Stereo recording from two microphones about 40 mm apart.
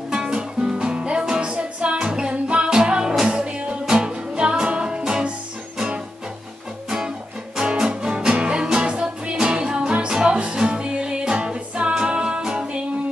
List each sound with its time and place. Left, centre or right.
0.1 s music: centre
6.9 s music: centre